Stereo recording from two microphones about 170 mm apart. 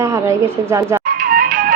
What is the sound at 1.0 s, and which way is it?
Music, 55° right (ahead or behind).